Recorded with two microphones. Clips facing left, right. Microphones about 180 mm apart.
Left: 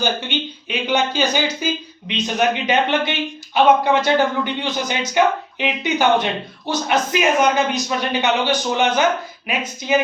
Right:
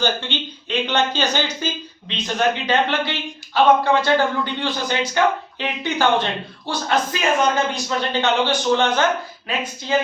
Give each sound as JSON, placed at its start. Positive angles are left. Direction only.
{"t": 0.0, "sound": "speech", "side_deg": 15}